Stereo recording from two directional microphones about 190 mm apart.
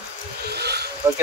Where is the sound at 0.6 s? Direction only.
60° right (ahead or behind).